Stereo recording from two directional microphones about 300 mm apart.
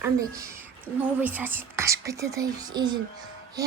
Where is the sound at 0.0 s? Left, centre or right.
Centre.